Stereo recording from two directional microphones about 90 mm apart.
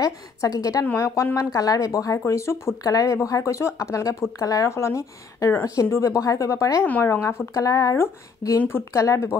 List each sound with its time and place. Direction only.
0.0 s speech: 45° left (ahead or behind)
0.8 s speech: 30° left (ahead or behind)
1.5 s speech: 40° left (ahead or behind)